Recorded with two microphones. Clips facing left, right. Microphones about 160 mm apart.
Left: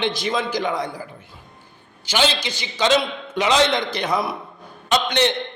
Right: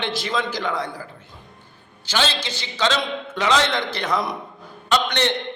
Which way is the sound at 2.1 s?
15° left (ahead or behind).